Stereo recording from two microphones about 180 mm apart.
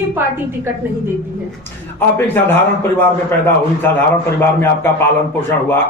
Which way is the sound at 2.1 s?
10° left (ahead or behind).